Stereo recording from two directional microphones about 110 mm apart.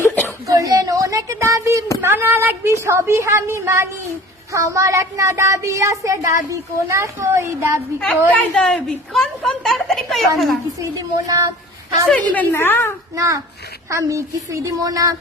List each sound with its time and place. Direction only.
0.4 s a sound: 30° right (ahead or behind)
2.0 s speech: 20° right (ahead or behind)
7.9 s a woman's voice: 10° left (ahead or behind)
12.1 s a woman's voice: 15° left (ahead or behind)
13.1 s speech: 30° right (ahead or behind)